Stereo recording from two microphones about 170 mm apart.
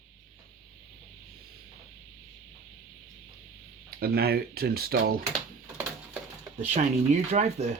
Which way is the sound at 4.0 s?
65° right (ahead or behind).